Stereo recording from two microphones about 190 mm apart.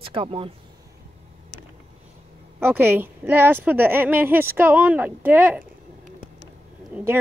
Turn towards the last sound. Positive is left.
turn(degrees=-10)  # may be behind; listen again after turning